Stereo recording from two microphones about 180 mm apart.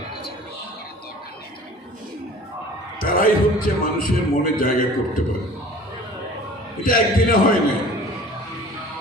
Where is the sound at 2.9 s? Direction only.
50° left (ahead or behind).